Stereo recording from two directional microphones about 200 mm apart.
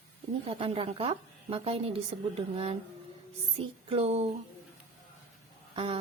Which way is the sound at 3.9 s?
30° right (ahead or behind).